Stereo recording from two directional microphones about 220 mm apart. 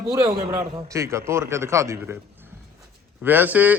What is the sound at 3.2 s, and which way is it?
Speech, 10° right (ahead or behind).